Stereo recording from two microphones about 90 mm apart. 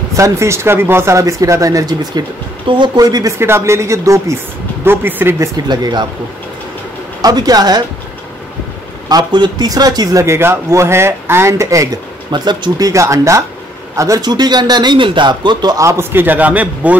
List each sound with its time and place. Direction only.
0.1 s speech: 35° right (ahead or behind)
2.6 s a man's voice: 65° right (ahead or behind)
3.0 s a man's voice: 45° right (ahead or behind)
3.3 s speech: 30° right (ahead or behind)
5.6 s a man's voice: 50° right (ahead or behind)
7.2 s a man's voice: 45° right (ahead or behind)
9.1 s a man's voice: 50° right (ahead or behind)
10.2 s speech: 30° right (ahead or behind)
12.3 s a man's voice: 55° right (ahead or behind)
15.8 s speech: 30° right (ahead or behind)